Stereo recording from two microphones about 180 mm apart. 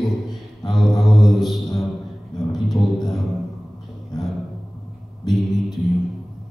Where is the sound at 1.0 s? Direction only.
Centre (ahead or behind).